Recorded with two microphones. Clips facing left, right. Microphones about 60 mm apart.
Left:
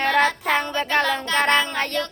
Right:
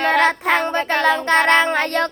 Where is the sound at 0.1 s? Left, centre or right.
Right.